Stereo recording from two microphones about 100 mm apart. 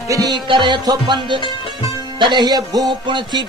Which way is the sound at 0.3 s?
55° right (ahead or behind).